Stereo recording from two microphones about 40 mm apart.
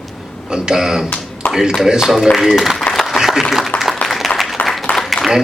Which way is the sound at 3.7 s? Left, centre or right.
Left.